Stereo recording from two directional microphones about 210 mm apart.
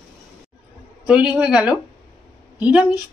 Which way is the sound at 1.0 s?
5° right (ahead or behind).